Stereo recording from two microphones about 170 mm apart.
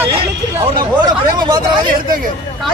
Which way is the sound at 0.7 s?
25° right (ahead or behind).